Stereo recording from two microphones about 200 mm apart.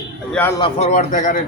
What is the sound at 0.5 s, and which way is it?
Speech, 25° left (ahead or behind).